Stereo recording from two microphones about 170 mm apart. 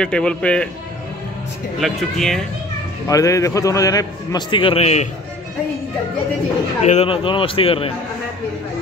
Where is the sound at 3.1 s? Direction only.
20° left (ahead or behind); by 5.0 s 40° left (ahead or behind).